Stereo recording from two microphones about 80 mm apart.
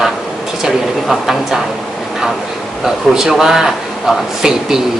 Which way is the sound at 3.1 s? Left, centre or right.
Centre.